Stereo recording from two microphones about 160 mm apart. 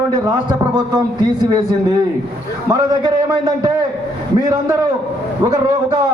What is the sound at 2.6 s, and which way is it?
A man's voice, 20° right (ahead or behind).